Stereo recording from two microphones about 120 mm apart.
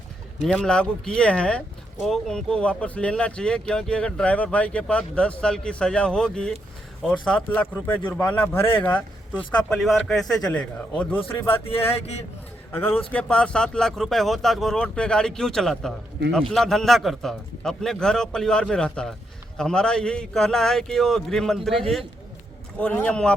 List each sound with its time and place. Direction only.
0.4 s speech: 5° left (ahead or behind)
11.5 s speech: 50° left (ahead or behind)
12.7 s speech: 15° left (ahead or behind)
22.8 s speech: 10° left (ahead or behind)